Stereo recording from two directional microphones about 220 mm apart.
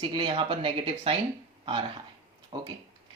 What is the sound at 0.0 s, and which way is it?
Speech, 20° right (ahead or behind).